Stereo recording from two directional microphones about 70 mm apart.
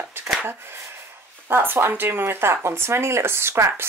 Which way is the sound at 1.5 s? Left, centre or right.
Right.